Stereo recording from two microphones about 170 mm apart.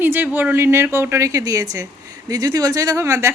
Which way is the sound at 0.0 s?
10° right (ahead or behind).